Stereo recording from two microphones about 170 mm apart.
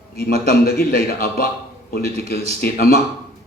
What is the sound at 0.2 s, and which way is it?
A man's voice, 65° left (ahead or behind).